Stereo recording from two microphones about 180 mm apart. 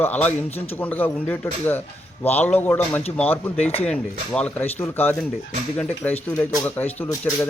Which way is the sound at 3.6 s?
35° left (ahead or behind).